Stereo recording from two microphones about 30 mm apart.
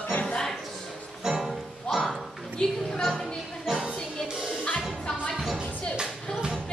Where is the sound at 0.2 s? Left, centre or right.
Left.